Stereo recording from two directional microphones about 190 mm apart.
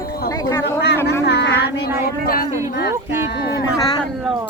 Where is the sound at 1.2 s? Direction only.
65° left (ahead or behind).